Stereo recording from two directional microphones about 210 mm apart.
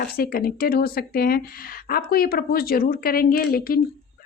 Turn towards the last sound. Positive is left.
turn(degrees=45)  # may be behind; listen again after turning